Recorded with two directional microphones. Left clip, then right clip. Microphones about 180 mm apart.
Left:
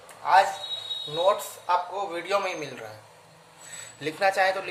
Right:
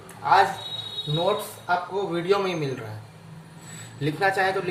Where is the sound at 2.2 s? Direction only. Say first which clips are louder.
Right 3 dB; 35° left (ahead or behind).